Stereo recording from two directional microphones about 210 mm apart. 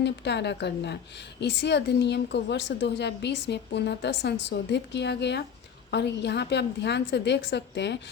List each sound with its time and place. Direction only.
0.0 s a woman's voice: 55° left (ahead or behind)